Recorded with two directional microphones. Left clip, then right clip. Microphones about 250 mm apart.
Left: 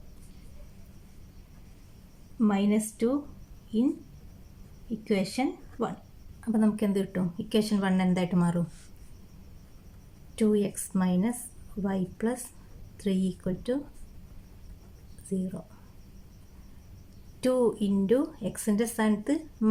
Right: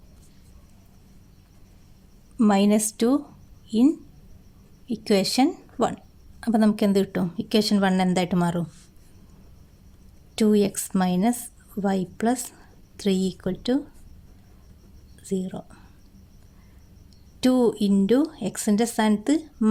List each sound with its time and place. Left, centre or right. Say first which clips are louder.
2.4 s speech: right 7 dB; right
4.9 s speech: right 8 dB; right
10.3 s speech: right 6 dB; right
15.3 s speech: right 6 dB; right
17.4 s speech: right 4 dB; right